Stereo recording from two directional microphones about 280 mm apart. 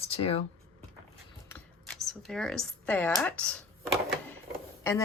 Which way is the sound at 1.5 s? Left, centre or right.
Centre.